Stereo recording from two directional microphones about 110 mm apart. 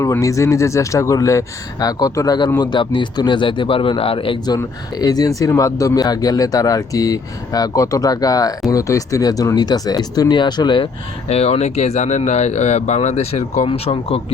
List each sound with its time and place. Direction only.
0.0 s speech: 30° left (ahead or behind); by 4.4 s 55° left (ahead or behind)
4.4 s speech: 35° left (ahead or behind)
11.3 s speech: 70° left (ahead or behind)
13.7 s speech: 60° left (ahead or behind)